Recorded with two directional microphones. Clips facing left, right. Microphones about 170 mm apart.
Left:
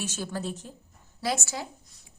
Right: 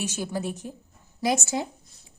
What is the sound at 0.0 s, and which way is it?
A woman's voice, 15° right (ahead or behind).